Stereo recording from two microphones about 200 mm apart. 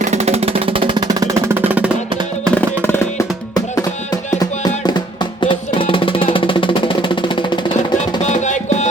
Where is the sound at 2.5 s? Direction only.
5° left (ahead or behind).